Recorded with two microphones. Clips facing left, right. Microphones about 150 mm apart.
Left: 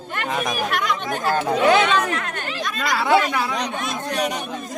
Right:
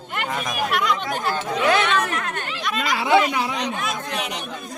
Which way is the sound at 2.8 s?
15° right (ahead or behind).